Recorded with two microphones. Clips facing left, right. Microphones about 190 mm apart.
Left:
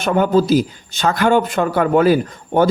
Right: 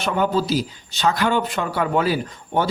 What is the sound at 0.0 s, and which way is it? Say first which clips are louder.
A man's voice: left 6 dB; 50° left (ahead or behind).